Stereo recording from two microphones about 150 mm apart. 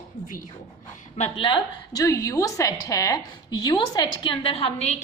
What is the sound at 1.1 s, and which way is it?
Speech, 40° left (ahead or behind).